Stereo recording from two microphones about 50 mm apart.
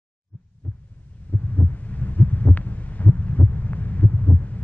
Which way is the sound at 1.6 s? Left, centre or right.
Left.